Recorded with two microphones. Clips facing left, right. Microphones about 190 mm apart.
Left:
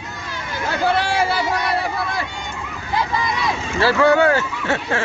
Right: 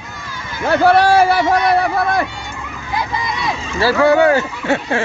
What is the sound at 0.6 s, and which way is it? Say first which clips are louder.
Speech: right 8 dB; 60° right (ahead or behind).